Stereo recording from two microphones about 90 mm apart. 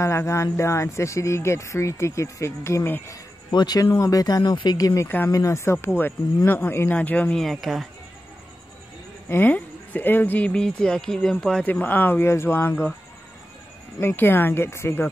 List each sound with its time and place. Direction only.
0.0 s speech: 30° left (ahead or behind)
3.5 s speech: 50° left (ahead or behind)
5.0 s speech: 20° left (ahead or behind)
5.3 s speech: 35° left (ahead or behind); by 7.3 s 15° left (ahead or behind)
7.3 s speech: centre (ahead or behind)
9.3 s speech: 20° left (ahead or behind)
11.6 s speech: 20° left (ahead or behind)
13.9 s speech: 25° left (ahead or behind)